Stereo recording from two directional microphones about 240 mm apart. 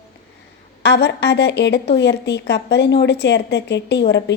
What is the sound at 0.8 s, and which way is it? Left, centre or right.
A woman's voice, left.